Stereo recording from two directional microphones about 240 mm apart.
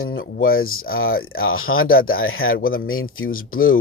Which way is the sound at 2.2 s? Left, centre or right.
Left.